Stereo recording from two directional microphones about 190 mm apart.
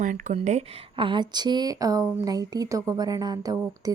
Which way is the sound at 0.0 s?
40° right (ahead or behind).